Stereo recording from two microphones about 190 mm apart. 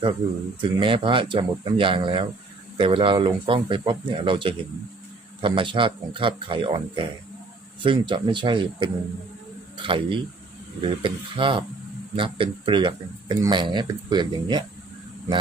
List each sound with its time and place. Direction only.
0.6 s speech: 25° right (ahead or behind)